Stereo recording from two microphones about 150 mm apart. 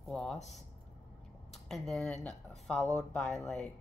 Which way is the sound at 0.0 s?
5° left (ahead or behind).